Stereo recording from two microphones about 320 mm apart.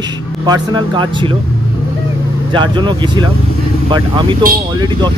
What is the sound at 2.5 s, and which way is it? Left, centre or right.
Speech, centre.